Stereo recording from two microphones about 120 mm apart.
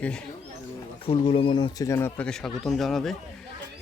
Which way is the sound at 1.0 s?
50° left (ahead or behind).